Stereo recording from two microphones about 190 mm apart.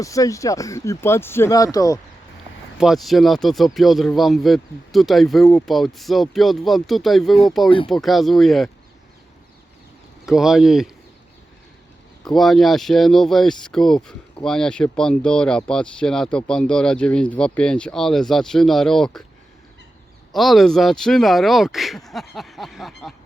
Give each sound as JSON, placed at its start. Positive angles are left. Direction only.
{"t": 0.0, "sound": "speech", "side_deg": 15}
{"t": 2.7, "sound": "speech", "side_deg": 0}
{"t": 10.2, "sound": "speech", "side_deg": 0}
{"t": 12.2, "sound": "speech", "side_deg": 0}
{"t": 20.3, "sound": "speech", "side_deg": 0}